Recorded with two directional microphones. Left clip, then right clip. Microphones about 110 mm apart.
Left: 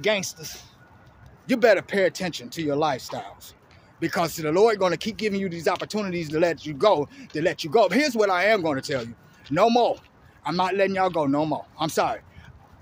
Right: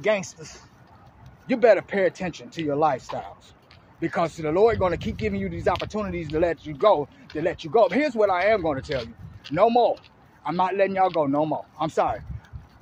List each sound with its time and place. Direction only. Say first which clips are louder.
0.0 s a man's voice: even; 30° left (ahead or behind)
1.5 s speech: right 1 dB; 40° left (ahead or behind)
4.0 s speech: even; 45° left (ahead or behind); by 8.1 s 70° left (ahead or behind)
8.1 s speech: even; 50° left (ahead or behind)
10.5 s speech: even; 50° left (ahead or behind)